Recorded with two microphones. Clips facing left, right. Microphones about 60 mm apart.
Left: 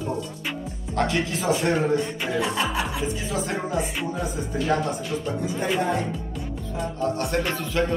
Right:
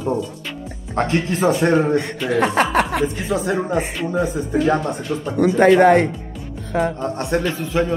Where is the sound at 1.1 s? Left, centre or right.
Right.